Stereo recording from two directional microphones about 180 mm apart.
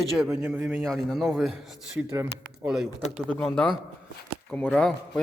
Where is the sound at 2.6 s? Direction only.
Centre (ahead or behind).